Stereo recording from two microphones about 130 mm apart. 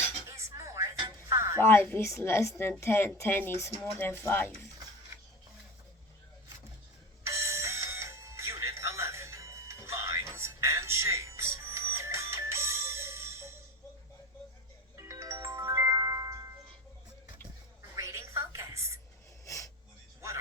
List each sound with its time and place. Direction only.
0.3 s dishes: 20° right (ahead or behind)
0.9 s music: 35° right (ahead or behind)
1.4 s music: 20° right (ahead or behind)
1.6 s a woman's voice: 20° left (ahead or behind)
7.3 s music: 20° right (ahead or behind)
14.9 s music: 25° right (ahead or behind)
17.9 s music: 20° right (ahead or behind)
19.5 s a sound: 25° left (ahead or behind)